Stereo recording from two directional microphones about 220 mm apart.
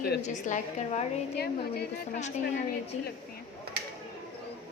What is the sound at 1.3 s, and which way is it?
Speech, 45° left (ahead or behind).